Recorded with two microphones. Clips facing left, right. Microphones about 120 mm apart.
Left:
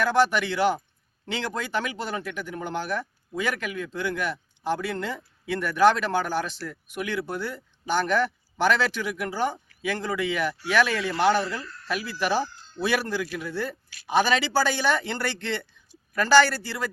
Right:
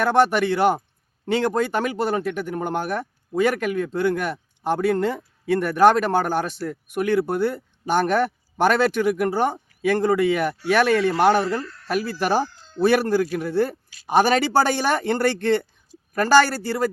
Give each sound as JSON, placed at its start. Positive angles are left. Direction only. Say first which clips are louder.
{"t": 0.0, "sound": "speech", "louder": "right 4 dB", "side_deg": -45}